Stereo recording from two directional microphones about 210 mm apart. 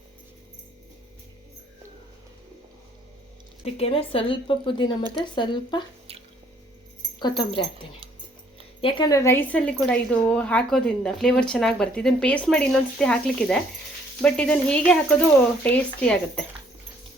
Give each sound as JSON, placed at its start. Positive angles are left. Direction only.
{"t": 3.6, "sound": "speech", "side_deg": 30}
{"t": 7.2, "sound": "a woman's voice", "side_deg": 20}